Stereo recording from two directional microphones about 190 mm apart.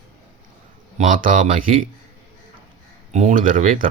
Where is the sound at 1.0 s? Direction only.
45° right (ahead or behind).